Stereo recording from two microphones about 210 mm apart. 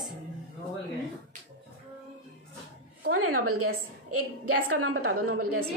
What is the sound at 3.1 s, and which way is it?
A woman's voice, 90° right.